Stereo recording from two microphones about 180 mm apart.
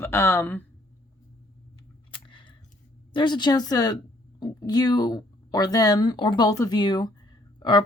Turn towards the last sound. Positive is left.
turn(degrees=25)  # may be behind; listen again after turning